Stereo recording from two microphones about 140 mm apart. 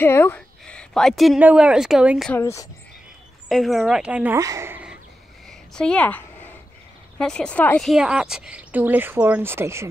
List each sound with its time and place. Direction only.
0.0 s a woman's voice: 15° left (ahead or behind); by 2.3 s 5° right (ahead or behind)
2.3 s speech: 20° left (ahead or behind)
3.4 s speech: centre (ahead or behind)
4.4 s speech: 20° right (ahead or behind)
5.5 s a sound: 5° left (ahead or behind)
7.2 s speech: 5° left (ahead or behind)
7.9 s a woman's voice: 5° right (ahead or behind)